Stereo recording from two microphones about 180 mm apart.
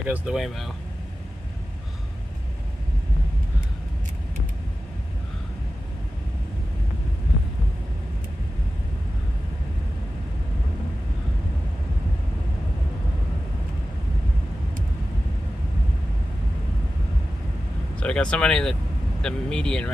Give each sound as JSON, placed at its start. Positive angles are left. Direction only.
{"t": 0.0, "sound": "speech", "side_deg": -10}
{"t": 17.9, "sound": "speech", "side_deg": 5}